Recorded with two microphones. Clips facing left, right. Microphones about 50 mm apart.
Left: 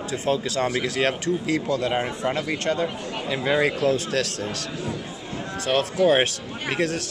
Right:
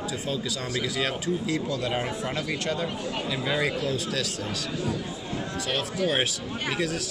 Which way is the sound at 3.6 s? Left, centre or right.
Left.